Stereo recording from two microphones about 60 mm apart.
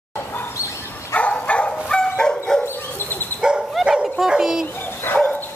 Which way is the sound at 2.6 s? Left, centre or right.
Left.